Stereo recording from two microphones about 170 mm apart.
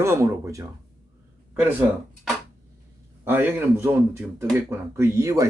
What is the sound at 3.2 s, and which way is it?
A man's voice, 10° right (ahead or behind).